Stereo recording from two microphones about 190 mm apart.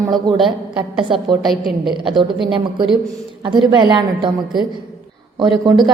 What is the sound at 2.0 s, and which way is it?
Speech, 25° right (ahead or behind).